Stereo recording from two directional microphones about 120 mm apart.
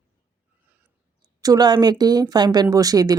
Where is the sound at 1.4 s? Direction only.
35° right (ahead or behind).